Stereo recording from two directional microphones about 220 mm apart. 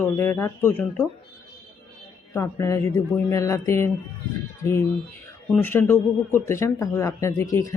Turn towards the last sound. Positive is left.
turn(degrees=15)  # may be behind; listen again after turning